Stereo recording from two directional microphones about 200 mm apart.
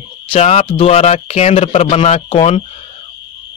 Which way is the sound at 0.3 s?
30° left (ahead or behind).